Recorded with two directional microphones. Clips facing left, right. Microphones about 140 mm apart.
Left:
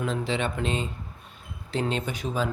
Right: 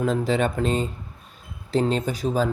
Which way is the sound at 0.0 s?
45° right (ahead or behind).